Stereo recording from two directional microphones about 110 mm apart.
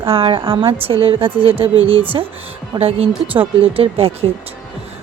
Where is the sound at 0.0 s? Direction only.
55° right (ahead or behind).